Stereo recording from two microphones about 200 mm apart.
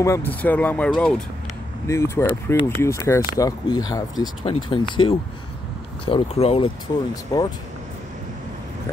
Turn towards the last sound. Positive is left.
turn(degrees=20)  # may be behind; listen again after turning